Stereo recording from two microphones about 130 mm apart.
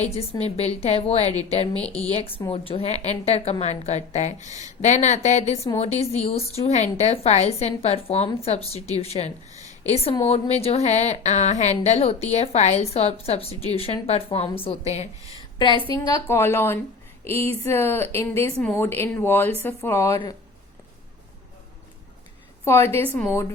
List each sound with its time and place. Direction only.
0.0 s a woman's voice: 55° left (ahead or behind)
1.8 s speech: 10° left (ahead or behind)
2.0 s a woman's voice: 50° left (ahead or behind)
9.6 s a sound: 55° left (ahead or behind)
10.2 s a woman's voice: 55° left (ahead or behind)
15.5 s a woman's voice: 35° left (ahead or behind)
16.2 s speech: 20° left (ahead or behind)
22.6 s speech: 20° left (ahead or behind)